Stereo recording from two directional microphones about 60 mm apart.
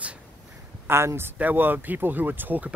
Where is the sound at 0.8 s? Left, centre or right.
Right.